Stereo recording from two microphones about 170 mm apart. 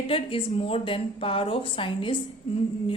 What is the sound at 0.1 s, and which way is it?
Speech, 35° left (ahead or behind).